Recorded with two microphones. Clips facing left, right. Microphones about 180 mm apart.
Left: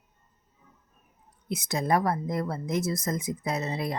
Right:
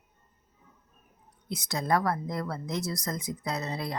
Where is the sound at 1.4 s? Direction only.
20° left (ahead or behind).